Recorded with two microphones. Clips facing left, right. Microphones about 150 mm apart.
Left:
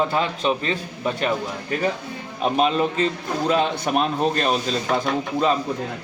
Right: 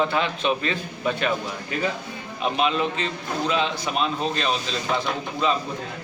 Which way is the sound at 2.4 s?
40° left (ahead or behind).